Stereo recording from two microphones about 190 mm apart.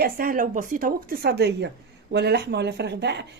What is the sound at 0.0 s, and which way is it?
A woman's voice, 50° right (ahead or behind).